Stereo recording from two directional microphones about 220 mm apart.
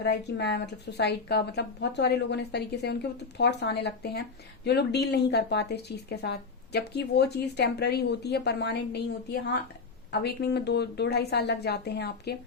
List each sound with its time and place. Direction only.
0.0 s speech: 50° left (ahead or behind)